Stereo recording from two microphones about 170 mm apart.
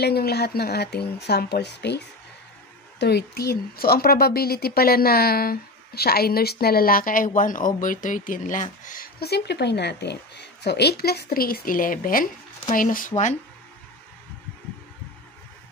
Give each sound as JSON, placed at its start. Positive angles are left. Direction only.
{"t": 0.0, "sound": "speech", "side_deg": 70}